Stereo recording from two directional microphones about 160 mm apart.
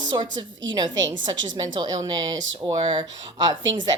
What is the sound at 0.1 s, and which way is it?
Speech, 30° right (ahead or behind).